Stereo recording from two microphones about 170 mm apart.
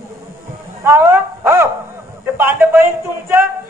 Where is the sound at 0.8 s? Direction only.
15° right (ahead or behind).